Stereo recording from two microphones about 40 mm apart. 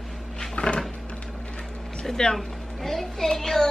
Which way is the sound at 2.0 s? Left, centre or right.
Centre.